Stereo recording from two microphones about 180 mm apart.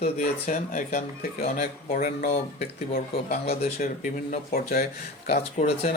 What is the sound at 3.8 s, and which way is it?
Speech, 50° left (ahead or behind).